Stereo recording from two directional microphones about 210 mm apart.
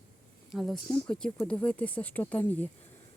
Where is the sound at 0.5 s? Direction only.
Centre (ahead or behind).